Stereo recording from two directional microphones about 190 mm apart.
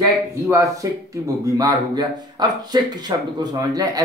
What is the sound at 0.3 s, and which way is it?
Speech, 15° right (ahead or behind).